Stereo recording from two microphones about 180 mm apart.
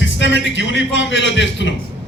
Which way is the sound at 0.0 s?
90° left.